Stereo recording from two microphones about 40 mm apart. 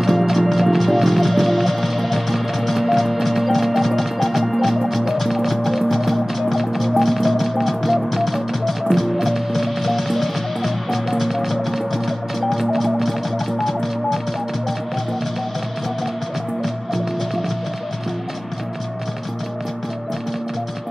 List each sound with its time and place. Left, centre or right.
0.0 s music: centre
16.6 s music: centre